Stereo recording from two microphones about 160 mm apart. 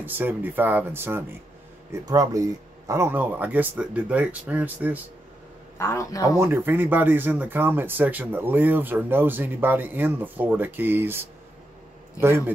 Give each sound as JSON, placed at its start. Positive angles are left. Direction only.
{"t": 0.0, "sound": "speech", "side_deg": -10}
{"t": 5.8, "sound": "a man's voice", "side_deg": 15}
{"t": 6.3, "sound": "speech", "side_deg": -15}
{"t": 12.2, "sound": "a man's voice", "side_deg": 20}